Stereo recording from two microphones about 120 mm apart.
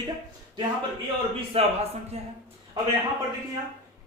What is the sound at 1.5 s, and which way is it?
Speech, 55° right (ahead or behind).